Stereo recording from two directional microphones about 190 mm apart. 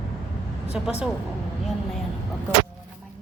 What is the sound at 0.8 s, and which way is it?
Speech, 5° right (ahead or behind).